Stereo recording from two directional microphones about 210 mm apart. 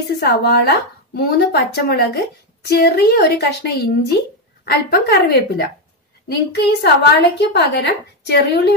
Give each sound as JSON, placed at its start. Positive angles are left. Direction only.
{"t": 0.1, "sound": "a woman's voice", "side_deg": 55}